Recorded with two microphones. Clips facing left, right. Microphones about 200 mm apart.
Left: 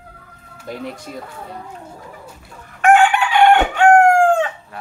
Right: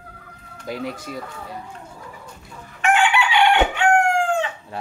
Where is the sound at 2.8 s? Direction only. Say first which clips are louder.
Left 6 dB; 50° left (ahead or behind).